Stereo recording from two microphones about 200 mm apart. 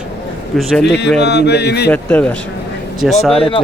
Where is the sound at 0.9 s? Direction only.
60° left (ahead or behind).